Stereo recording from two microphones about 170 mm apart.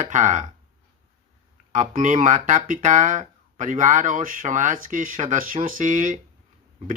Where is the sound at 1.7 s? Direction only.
50° right (ahead or behind).